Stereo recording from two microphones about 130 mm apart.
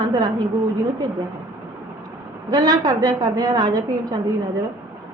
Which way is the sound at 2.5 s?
30° right (ahead or behind).